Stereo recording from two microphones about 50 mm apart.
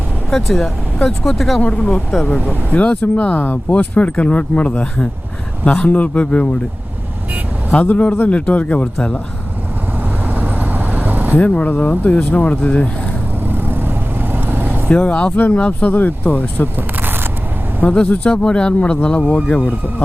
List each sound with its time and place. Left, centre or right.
0.3 s speech: centre
1.6 s a man's voice: left
2.2 s a man's voice: left
7.7 s a man's voice: left
10.2 s vehicle: right
11.3 s speech: left
13.5 s vehicle: right
14.8 s a man's voice: left
16.7 s single-lens reflex camera: right
17.8 s a man's voice: left